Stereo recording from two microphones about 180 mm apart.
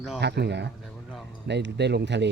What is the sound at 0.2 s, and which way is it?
A man's voice, 70° right (ahead or behind).